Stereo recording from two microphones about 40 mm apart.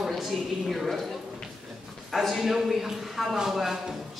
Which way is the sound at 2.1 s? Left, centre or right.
Centre.